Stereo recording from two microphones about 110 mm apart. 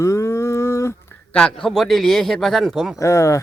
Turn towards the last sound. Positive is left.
turn(degrees=30)  # may be behind; listen again after turning